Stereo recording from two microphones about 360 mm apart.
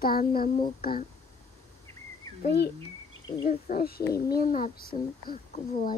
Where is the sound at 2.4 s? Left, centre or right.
Left.